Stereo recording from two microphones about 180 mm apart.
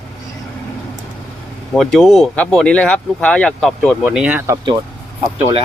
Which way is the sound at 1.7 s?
Centre (ahead or behind).